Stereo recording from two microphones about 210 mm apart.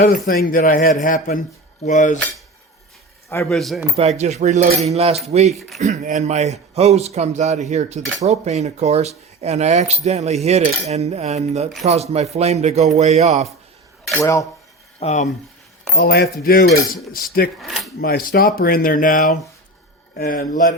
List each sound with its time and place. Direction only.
0.3 s speech: 40° left (ahead or behind)
3.5 s coin: centre (ahead or behind)
4.2 s speech: 35° right (ahead or behind)
4.9 s cutlery: 30° right (ahead or behind)
5.3 s speech: 30° right (ahead or behind)
5.5 s coin: centre (ahead or behind)
5.8 s speech: 35° right (ahead or behind)
14.1 s cutlery: 10° left (ahead or behind)
14.9 s speech: 30° left (ahead or behind)
16.0 s speech: 50° left (ahead or behind)
17.6 s coin: centre (ahead or behind)
18.0 s speech: 45° left (ahead or behind)